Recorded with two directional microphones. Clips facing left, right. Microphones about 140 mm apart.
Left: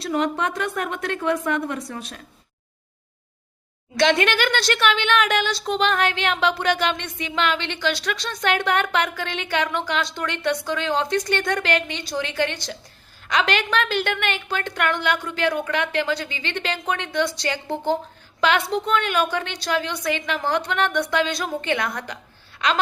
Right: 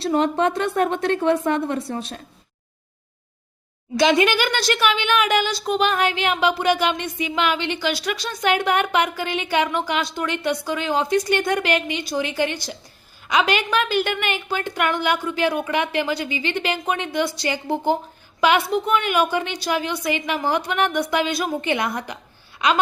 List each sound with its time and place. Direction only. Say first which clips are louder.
0.0 s a woman's voice: right 4 dB; 30° right (ahead or behind)
3.9 s a woman's voice: right 2 dB; 5° right (ahead or behind)